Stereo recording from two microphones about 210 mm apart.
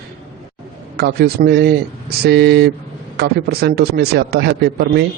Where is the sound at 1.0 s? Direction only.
50° right (ahead or behind).